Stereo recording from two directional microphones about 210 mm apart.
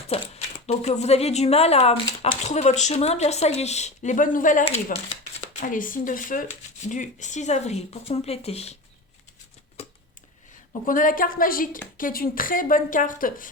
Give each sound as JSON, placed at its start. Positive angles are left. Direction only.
{"t": 0.1, "sound": "speech", "side_deg": 30}
{"t": 9.8, "sound": "a sound", "side_deg": 30}
{"t": 10.8, "sound": "speech", "side_deg": 40}